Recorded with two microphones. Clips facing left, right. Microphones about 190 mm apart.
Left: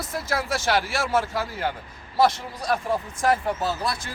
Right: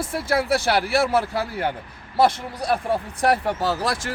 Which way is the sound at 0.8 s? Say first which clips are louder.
Right 7 dB; 60° right (ahead or behind).